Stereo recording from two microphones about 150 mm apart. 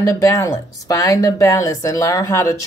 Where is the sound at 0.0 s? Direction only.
20° left (ahead or behind).